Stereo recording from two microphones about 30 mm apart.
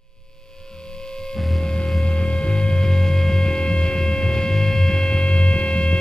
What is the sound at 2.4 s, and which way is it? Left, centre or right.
Hum, left.